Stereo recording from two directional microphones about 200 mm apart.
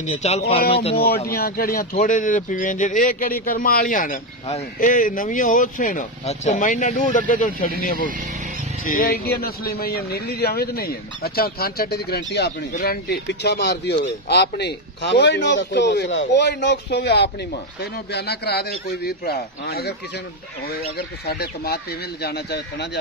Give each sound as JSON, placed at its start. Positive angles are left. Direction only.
{"t": 0.0, "sound": "speech", "side_deg": 35}
{"t": 0.9, "sound": "a man's voice", "side_deg": 50}
{"t": 21.3, "sound": "a man's voice", "side_deg": 50}